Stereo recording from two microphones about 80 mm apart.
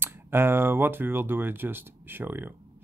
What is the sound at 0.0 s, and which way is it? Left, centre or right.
Speech, right.